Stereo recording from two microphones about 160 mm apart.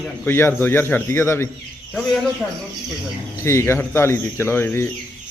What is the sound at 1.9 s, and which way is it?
Speech, 5° left (ahead or behind).